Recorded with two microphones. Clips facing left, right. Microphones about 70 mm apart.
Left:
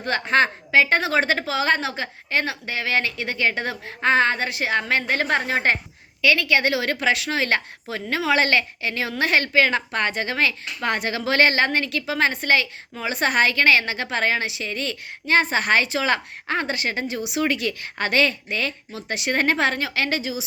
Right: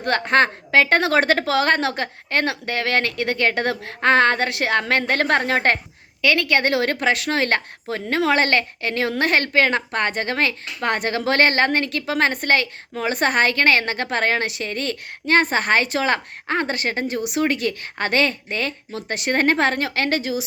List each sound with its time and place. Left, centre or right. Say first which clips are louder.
0.0 s a woman's voice: right 2 dB; right
6.2 s a woman's voice: right 1 dB; right